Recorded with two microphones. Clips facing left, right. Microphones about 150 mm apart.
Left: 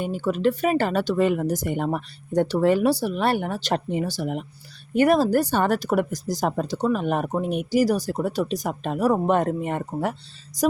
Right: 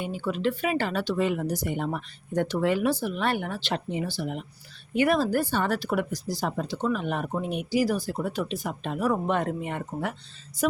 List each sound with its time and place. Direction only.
0.0 s speech: 45° left (ahead or behind)
2.3 s speech: 35° left (ahead or behind)